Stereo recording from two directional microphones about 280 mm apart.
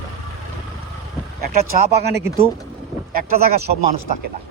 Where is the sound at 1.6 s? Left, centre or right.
Right.